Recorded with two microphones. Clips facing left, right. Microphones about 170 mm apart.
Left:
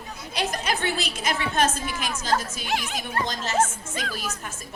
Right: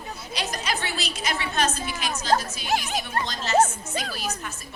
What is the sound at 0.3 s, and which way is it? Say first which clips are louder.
A woman's voice: left 3 dB; 55° left (ahead or behind).